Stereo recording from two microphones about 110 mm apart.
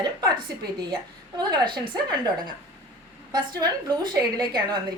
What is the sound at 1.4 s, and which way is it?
Speech, 45° right (ahead or behind).